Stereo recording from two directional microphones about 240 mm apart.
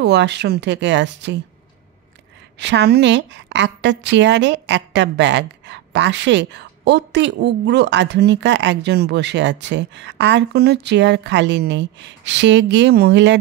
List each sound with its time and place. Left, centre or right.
0.0 s a woman's voice: right
2.6 s a woman's voice: right